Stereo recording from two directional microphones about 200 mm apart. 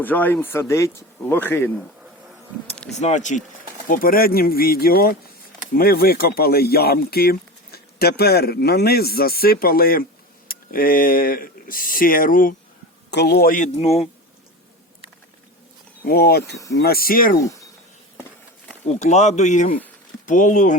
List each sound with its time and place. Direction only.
0.0 s speech: 10° left (ahead or behind)
2.9 s speech: 35° left (ahead or behind)
13.1 s speech: 55° left (ahead or behind); by 14.1 s 30° left (ahead or behind)
16.0 s speech: 50° left (ahead or behind)
17.4 s speech: 15° left (ahead or behind)
18.9 s speech: 35° left (ahead or behind)